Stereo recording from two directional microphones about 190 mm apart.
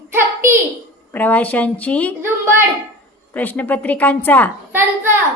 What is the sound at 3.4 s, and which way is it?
A woman's voice, 10° left (ahead or behind).